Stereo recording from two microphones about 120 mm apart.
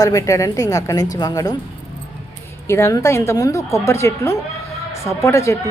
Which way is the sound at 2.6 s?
25° left (ahead or behind).